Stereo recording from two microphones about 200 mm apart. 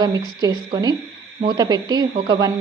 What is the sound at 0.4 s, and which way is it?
A woman's voice, 20° right (ahead or behind).